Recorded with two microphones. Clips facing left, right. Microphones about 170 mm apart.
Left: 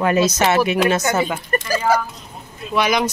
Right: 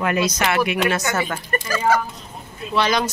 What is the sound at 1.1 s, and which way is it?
Speech, 20° left (ahead or behind).